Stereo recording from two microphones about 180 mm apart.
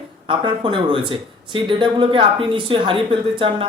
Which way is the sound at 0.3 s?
30° right (ahead or behind).